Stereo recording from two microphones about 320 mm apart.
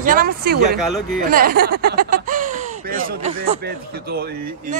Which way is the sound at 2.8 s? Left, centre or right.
Right.